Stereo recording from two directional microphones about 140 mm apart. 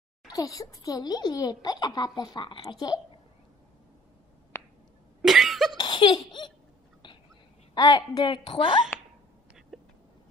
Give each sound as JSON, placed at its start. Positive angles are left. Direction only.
{"t": 0.3, "sound": "a child's voice", "side_deg": 25}
{"t": 5.2, "sound": "cough", "side_deg": 0}
{"t": 5.8, "sound": "laughter", "side_deg": 35}
{"t": 7.7, "sound": "a woman's voice", "side_deg": 30}
{"t": 8.9, "sound": "a sound", "side_deg": 15}
{"t": 9.7, "sound": "vehicle", "side_deg": -5}